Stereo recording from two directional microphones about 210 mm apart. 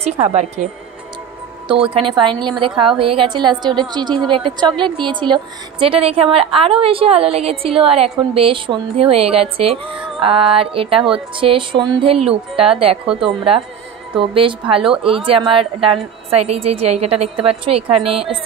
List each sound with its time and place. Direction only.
0.0 s a woman's voice: 30° right (ahead or behind)
2.0 s a woman's voice: 25° right (ahead or behind)
13.0 s speech: 5° right (ahead or behind)
14.1 s a woman's voice: 25° right (ahead or behind)